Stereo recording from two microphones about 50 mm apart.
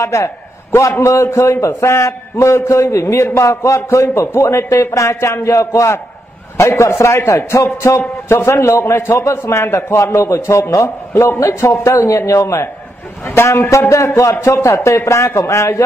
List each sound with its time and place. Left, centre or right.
0.0 s a man's voice: left
1.0 s a man's voice: left
3.3 s a man's voice: left
6.5 s a man's voice: left
8.3 s a man's voice: left
11.8 s a man's voice: left
13.3 s a man's voice: left
14.4 s a man's voice: left